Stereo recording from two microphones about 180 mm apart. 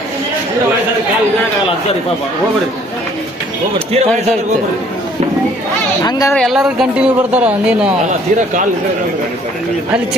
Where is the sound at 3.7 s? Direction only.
35° right (ahead or behind).